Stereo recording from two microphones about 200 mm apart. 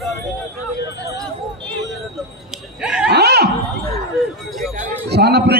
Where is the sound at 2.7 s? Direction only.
5° right (ahead or behind).